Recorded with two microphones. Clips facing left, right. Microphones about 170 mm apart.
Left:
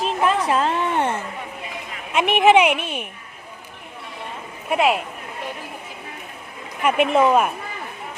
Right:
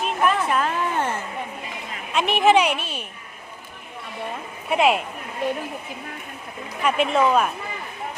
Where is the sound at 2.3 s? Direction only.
15° left (ahead or behind).